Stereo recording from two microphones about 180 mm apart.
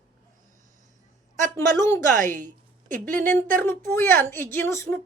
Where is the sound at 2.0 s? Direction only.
45° right (ahead or behind).